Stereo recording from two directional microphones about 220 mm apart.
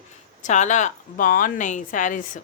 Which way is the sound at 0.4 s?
35° left (ahead or behind).